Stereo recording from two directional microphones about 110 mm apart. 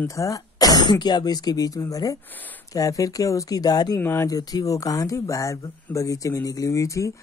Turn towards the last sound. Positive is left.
turn(degrees=30)  # may be behind; listen again after turning